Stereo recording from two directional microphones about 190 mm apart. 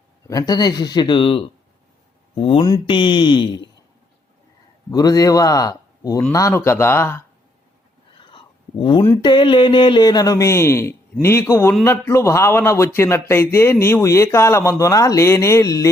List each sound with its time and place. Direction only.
0.3 s a man's voice: 20° left (ahead or behind)
4.9 s a man's voice: 20° left (ahead or behind)
8.2 s a sound: 25° left (ahead or behind)
9.2 s speech: 25° left (ahead or behind)